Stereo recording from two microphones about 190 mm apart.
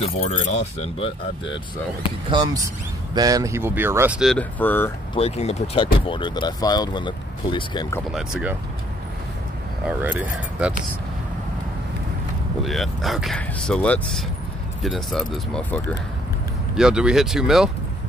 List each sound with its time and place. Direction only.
0.0 s speech: 35° left (ahead or behind)
2.3 s speech: 20° right (ahead or behind)
4.2 s speech: 5° left (ahead or behind)
5.1 s speech: 35° left (ahead or behind)
8.1 s speech: 5° right (ahead or behind)
9.8 s speech: 10° right (ahead or behind)
12.6 s speech: centre (ahead or behind)